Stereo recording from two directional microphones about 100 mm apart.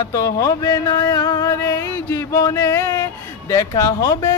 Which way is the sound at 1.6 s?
25° left (ahead or behind).